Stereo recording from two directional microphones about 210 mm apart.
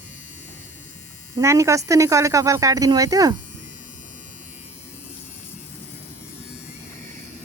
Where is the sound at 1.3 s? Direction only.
15° right (ahead or behind).